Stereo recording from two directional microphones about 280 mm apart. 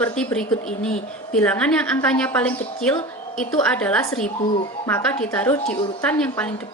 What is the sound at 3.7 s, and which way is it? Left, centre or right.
A woman's voice, centre.